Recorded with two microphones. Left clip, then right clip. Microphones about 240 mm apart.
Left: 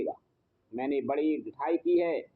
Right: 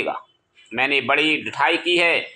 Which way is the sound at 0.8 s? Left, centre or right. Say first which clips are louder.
Right 12 dB; right.